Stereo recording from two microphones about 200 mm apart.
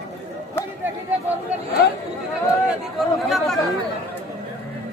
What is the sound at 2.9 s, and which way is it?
Speech, centre (ahead or behind).